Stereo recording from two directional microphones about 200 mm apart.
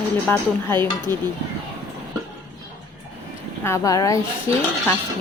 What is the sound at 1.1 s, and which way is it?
Speech, 20° right (ahead or behind).